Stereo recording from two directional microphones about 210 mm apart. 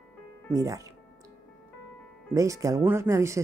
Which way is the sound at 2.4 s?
15° right (ahead or behind).